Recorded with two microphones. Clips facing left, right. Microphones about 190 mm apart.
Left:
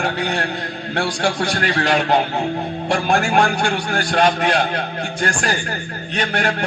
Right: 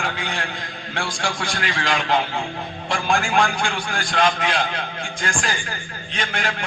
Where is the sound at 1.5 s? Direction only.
40° left (ahead or behind).